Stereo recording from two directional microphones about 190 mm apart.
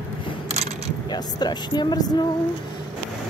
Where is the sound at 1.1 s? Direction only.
20° left (ahead or behind).